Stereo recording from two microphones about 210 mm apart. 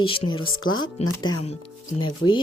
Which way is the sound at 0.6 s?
75° left (ahead or behind).